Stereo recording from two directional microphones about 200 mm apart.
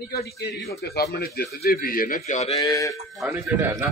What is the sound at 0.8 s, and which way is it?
Speech, 50° left (ahead or behind).